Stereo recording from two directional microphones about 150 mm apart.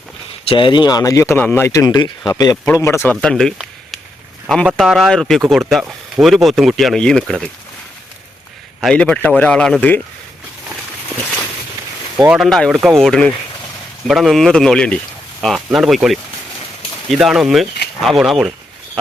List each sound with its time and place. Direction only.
0.4 s speech: 35° left (ahead or behind); by 7.5 s 5° left (ahead or behind)
8.8 s a man's voice: 5° left (ahead or behind)
12.1 s speech: 15° right (ahead or behind)
12.4 s speech: centre (ahead or behind)
12.7 s speech: 10° right (ahead or behind)
13.0 s speech: 5° left (ahead or behind)